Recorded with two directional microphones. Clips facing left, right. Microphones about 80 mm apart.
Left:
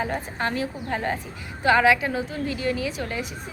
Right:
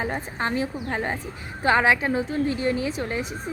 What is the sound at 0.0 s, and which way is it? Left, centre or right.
A woman's voice, right.